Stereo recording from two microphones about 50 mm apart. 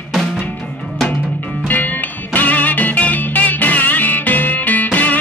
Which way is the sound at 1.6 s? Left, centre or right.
Left.